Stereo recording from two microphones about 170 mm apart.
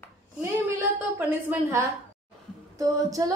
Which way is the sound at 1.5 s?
15° right (ahead or behind).